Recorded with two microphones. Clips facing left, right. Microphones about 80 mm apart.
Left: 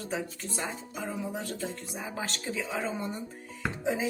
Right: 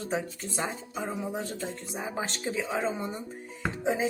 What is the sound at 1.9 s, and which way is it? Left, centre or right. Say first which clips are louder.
Speech: right 3 dB; right.